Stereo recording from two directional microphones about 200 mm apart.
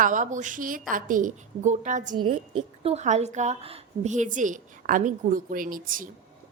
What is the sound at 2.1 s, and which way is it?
A woman's voice, 25° right (ahead or behind).